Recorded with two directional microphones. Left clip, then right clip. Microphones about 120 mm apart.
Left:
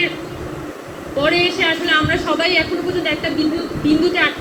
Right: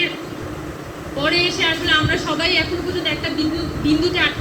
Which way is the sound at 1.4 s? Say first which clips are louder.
Left 2 dB; 45° right (ahead or behind).